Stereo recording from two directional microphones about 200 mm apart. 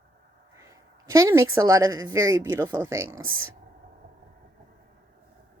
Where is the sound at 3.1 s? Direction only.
90° right.